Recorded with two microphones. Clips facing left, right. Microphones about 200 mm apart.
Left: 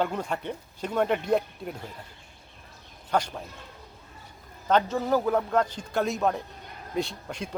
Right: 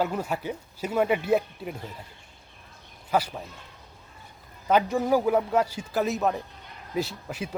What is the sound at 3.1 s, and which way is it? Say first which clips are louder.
Speech: right 1 dB; 5° right (ahead or behind).